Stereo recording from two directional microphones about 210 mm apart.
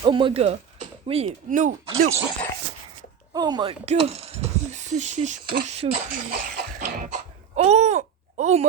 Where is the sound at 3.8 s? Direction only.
30° right (ahead or behind).